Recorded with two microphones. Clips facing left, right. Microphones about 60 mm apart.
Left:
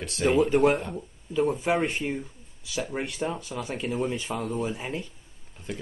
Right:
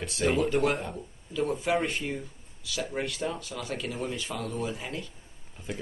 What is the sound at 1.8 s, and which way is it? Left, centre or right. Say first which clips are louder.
Speech: left 3 dB; centre.